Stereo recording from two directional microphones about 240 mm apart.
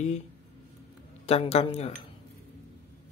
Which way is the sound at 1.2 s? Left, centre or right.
Left.